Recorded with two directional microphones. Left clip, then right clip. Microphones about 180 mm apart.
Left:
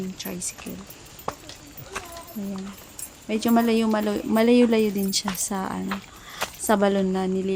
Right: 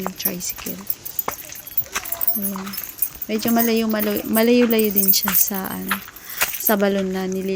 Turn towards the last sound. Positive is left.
turn(degrees=-5)  # may be behind; listen again after turning